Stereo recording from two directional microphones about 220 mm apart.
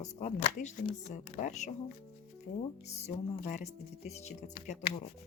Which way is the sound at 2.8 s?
30° left (ahead or behind).